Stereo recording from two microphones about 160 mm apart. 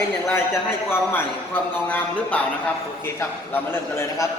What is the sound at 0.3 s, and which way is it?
A man's voice, 15° left (ahead or behind).